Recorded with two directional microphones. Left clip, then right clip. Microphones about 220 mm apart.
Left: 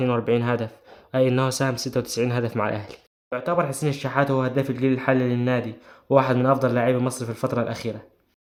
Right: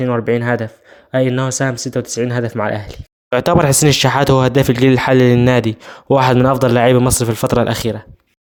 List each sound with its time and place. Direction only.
0.2 s speech: 20° right (ahead or behind)
3.2 s speech: 50° right (ahead or behind)